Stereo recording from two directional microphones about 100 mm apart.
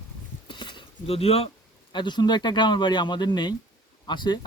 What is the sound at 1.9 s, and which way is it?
Speech, 50° left (ahead or behind).